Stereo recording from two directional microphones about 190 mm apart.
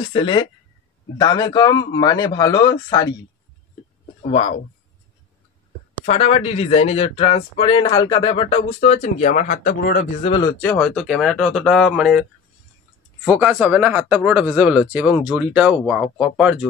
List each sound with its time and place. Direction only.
0.1 s a man's voice: 25° left (ahead or behind)
4.2 s a man's voice: 30° left (ahead or behind)
6.0 s speech: 35° left (ahead or behind)
10.2 s a man's voice: 25° left (ahead or behind)
10.6 s speech: 5° left (ahead or behind)